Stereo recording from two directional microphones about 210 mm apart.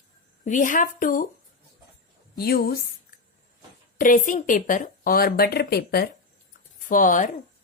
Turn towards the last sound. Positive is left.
turn(degrees=40)  # may be behind; listen again after turning